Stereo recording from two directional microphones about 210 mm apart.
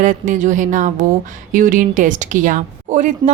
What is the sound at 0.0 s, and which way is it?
A woman's voice, 40° right (ahead or behind).